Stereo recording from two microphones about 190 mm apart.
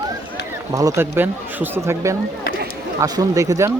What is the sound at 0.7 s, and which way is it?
Speech, 20° right (ahead or behind).